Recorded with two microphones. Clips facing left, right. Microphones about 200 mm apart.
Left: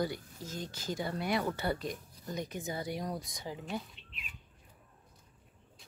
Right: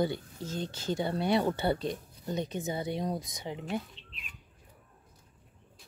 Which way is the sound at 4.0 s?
30° right (ahead or behind).